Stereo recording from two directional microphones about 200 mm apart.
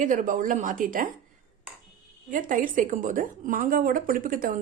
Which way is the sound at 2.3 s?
40° right (ahead or behind).